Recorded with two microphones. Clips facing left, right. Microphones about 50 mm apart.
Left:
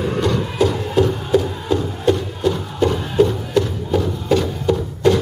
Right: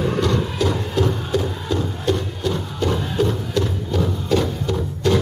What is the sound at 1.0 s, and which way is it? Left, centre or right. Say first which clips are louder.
Music: left 4 dB; centre.